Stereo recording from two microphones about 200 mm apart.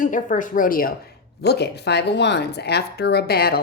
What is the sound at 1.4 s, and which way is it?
Speech, 55° left (ahead or behind).